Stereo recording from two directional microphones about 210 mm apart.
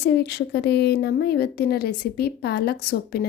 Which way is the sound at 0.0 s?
50° left (ahead or behind).